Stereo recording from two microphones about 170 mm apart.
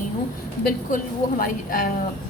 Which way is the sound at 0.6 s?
55° left (ahead or behind).